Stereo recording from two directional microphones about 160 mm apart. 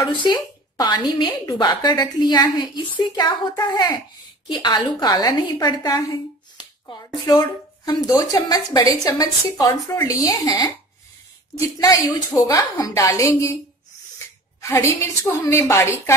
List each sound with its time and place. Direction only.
0.0 s a woman's voice: 30° left (ahead or behind)
11.8 s a woman's voice: 20° left (ahead or behind)
14.1 s sneeze: 20° left (ahead or behind)
15.5 s a woman's voice: 15° left (ahead or behind)